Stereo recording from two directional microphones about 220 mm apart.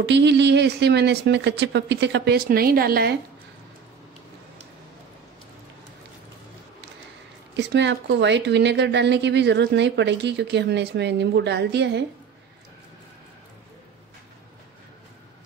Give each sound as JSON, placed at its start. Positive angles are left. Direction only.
{"t": 0.0, "sound": "speech", "side_deg": -55}
{"t": 7.5, "sound": "speech", "side_deg": -55}